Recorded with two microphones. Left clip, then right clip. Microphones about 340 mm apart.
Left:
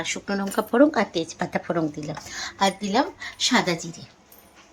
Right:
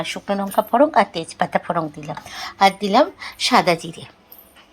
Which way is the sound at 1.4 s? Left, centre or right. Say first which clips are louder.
Right 10 dB; right.